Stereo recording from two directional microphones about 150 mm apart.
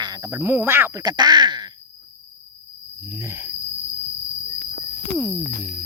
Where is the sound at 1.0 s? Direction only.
25° right (ahead or behind).